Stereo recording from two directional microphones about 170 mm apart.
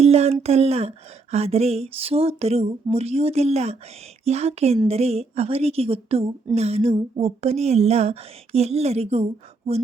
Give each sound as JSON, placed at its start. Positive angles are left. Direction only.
{"t": 0.0, "sound": "a woman's voice", "side_deg": -40}